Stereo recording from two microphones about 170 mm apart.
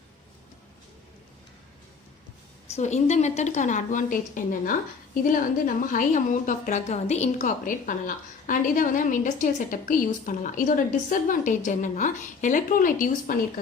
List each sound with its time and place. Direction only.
2.7 s a woman's voice: 40° left (ahead or behind)